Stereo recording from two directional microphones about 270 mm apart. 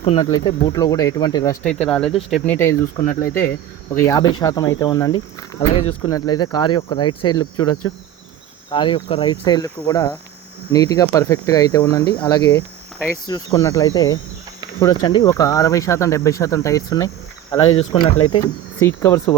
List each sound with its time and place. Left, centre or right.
0.0 s speech: centre
1.6 s speech: centre
3.1 s speech: left
3.9 s speech: centre
5.7 s speech: left
6.0 s speech: centre
8.7 s speech: centre